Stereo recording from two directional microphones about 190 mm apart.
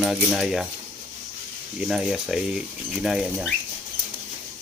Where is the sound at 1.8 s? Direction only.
Centre (ahead or behind).